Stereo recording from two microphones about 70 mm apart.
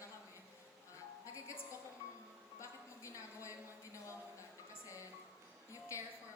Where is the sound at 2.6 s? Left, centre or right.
Left.